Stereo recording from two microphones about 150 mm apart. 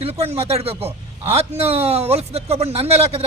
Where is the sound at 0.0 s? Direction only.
40° right (ahead or behind).